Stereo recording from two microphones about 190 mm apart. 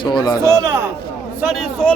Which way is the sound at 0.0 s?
25° left (ahead or behind).